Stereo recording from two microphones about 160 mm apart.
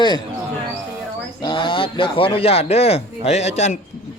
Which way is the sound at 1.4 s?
30° left (ahead or behind).